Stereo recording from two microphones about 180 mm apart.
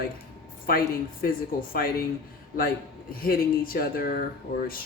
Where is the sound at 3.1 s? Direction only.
55° left (ahead or behind).